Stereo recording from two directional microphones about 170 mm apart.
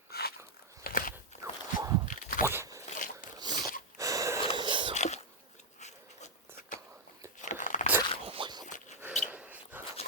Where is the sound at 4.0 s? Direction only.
20° right (ahead or behind).